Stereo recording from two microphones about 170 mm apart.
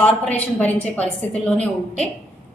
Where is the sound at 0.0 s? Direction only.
10° left (ahead or behind).